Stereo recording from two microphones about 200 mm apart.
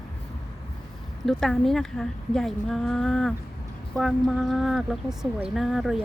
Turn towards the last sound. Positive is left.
turn(degrees=0)  # may be behind; listen again after turning